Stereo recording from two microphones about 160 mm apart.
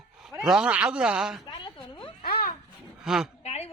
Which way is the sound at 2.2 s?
70° left (ahead or behind).